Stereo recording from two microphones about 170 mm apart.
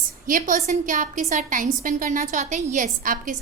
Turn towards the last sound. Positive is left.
turn(degrees=-50)  # may be behind; listen again after turning